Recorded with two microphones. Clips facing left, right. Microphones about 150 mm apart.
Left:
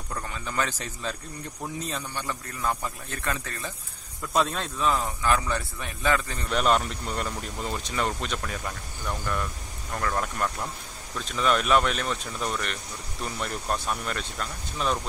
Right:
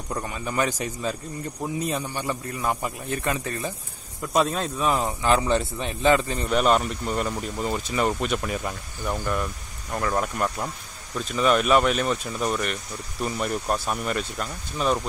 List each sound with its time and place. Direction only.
0.1 s a man's voice: 15° right (ahead or behind)
6.5 s a man's voice: 5° right (ahead or behind)